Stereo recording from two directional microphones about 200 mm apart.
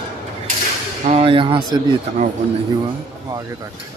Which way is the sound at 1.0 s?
30° right (ahead or behind).